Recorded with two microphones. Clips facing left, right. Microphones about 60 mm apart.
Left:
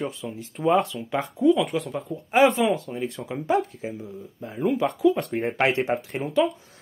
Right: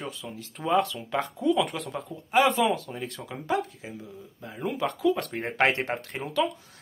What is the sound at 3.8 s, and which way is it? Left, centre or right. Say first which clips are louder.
Speech: left 7 dB; left.